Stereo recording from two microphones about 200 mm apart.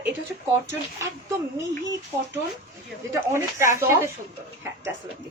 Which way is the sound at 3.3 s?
15° right (ahead or behind).